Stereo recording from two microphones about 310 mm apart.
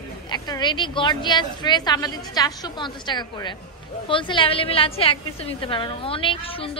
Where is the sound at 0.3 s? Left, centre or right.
Centre.